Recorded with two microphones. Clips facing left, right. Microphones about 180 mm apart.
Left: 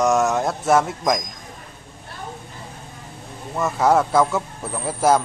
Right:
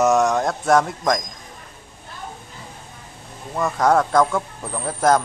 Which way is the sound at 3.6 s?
5° left (ahead or behind).